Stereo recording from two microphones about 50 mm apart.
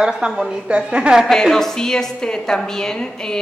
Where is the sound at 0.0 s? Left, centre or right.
Centre.